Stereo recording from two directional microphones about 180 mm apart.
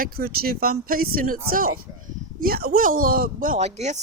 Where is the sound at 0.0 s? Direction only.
55° right (ahead or behind).